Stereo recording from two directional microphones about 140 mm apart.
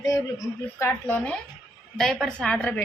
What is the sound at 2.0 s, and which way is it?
Speech, 5° left (ahead or behind).